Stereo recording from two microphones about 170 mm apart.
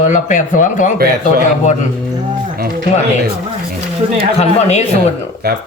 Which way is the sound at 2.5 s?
60° right (ahead or behind).